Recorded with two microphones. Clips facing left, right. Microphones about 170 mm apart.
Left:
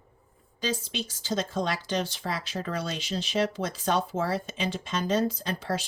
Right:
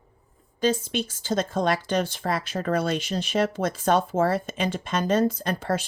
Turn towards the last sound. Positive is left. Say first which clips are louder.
# right 4 dB
turn(degrees=-50)  # may be behind; listen again after turning